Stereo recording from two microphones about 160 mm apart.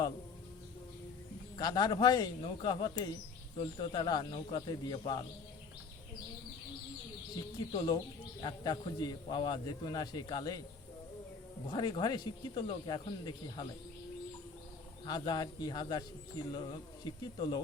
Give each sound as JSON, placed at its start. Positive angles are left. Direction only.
{"t": 1.5, "sound": "a man's voice", "side_deg": 25}
{"t": 7.7, "sound": "a man's voice", "side_deg": 30}
{"t": 11.7, "sound": "a man's voice", "side_deg": 25}
{"t": 15.0, "sound": "a man's voice", "side_deg": 25}